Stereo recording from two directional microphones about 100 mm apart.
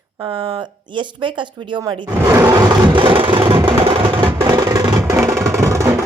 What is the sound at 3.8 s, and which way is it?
Music, 60° right (ahead or behind).